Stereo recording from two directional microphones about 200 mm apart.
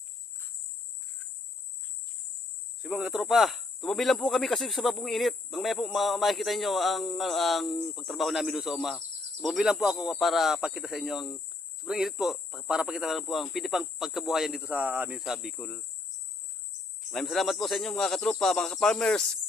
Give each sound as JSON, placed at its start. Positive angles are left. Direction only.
{"t": 2.8, "sound": "speech", "side_deg": 0}
{"t": 17.1, "sound": "speech", "side_deg": 0}